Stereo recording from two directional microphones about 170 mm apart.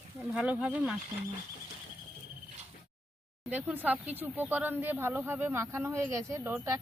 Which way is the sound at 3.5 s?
10° right (ahead or behind).